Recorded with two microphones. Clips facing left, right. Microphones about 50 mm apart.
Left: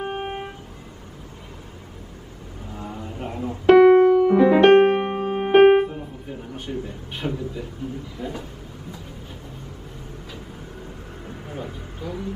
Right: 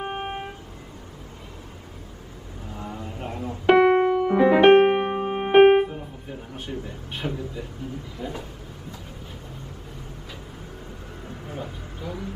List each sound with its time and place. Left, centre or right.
0.0 s vehicle: centre
2.9 s a sound: left
3.2 s music: centre
3.6 s piano: centre
7.2 s a man's voice: centre
8.2 s speech: centre
11.5 s a sound: centre